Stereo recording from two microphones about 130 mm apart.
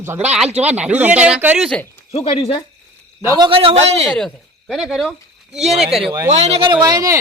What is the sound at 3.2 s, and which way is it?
Speech, 30° right (ahead or behind).